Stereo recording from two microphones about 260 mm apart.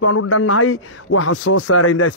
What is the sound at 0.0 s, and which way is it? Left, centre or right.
A man's voice, left.